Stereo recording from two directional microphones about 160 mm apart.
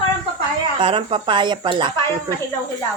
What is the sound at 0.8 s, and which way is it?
Speech, 35° right (ahead or behind).